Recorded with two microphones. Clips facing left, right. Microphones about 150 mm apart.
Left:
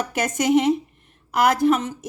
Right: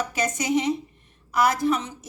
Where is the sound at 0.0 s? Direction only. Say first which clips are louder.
Left 4 dB; 55° left (ahead or behind).